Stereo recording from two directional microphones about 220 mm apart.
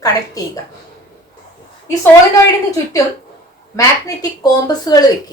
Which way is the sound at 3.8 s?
15° left (ahead or behind).